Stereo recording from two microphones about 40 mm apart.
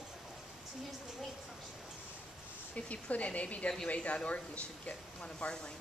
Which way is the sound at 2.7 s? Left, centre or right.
Left.